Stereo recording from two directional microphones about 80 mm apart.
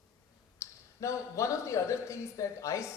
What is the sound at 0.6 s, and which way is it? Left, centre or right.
A man's voice, left.